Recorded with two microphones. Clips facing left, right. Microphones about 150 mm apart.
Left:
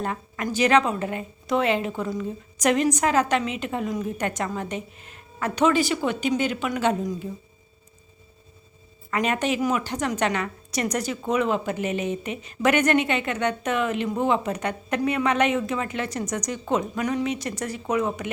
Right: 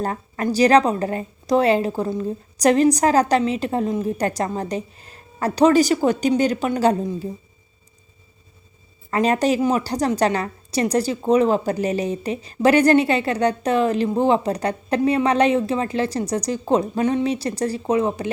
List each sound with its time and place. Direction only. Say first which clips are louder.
0.0 s a woman's voice: right 5 dB; 35° right (ahead or behind)
9.0 s a woman's voice: right 6 dB; 35° right (ahead or behind)